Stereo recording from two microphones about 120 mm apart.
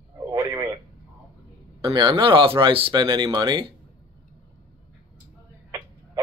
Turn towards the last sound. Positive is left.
turn(degrees=-30)  # may be behind; listen again after turning